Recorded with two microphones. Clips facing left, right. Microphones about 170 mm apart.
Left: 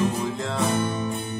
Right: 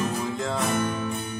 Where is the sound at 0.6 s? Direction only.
30° left (ahead or behind).